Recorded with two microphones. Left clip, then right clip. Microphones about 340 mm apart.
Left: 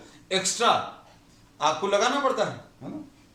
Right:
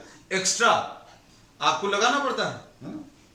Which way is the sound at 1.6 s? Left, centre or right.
Centre.